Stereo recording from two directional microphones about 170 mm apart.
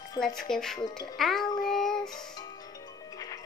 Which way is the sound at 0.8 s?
25° left (ahead or behind).